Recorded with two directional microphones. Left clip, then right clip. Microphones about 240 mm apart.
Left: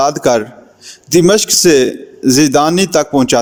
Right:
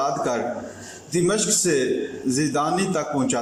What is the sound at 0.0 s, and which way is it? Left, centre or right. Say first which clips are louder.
A man's voice: left 11 dB; left.